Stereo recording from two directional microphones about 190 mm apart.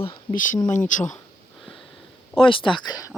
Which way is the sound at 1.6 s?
Centre (ahead or behind).